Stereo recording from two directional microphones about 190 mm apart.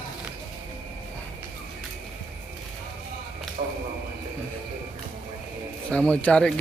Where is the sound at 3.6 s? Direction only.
40° right (ahead or behind).